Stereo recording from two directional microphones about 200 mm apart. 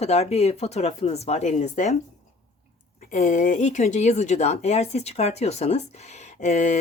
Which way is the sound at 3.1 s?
40° left (ahead or behind).